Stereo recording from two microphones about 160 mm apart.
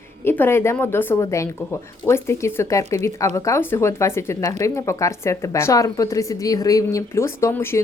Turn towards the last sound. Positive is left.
turn(degrees=15)  # may be behind; listen again after turning